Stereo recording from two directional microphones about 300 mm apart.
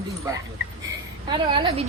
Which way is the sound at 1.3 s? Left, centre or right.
Centre.